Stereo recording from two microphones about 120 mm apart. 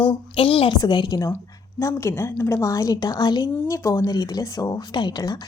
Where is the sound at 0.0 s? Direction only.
45° left (ahead or behind).